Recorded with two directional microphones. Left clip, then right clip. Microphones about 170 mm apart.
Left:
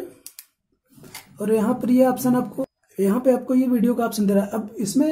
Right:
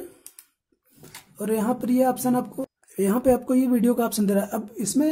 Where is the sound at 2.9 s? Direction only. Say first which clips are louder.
Left 1 dB; 35° right (ahead or behind).